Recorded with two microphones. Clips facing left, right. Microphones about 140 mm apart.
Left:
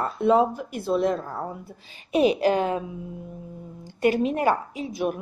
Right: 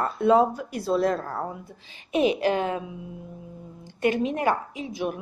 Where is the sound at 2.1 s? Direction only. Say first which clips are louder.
Left 2 dB; 35° left (ahead or behind).